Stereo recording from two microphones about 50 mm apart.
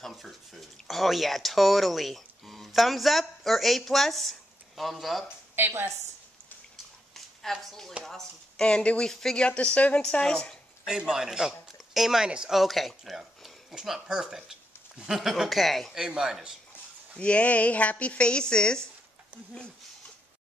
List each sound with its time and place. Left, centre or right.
0.0 s speech: centre
5.6 s a woman's voice: right
7.5 s a woman's voice: centre
8.6 s a woman's voice: centre
9.4 s a woman's voice: left
10.9 s speech: centre
12.5 s speech: centre
13.4 s a sound: centre
14.0 s speech: centre
15.6 s speech: centre
15.9 s speech: centre
17.2 s speech: left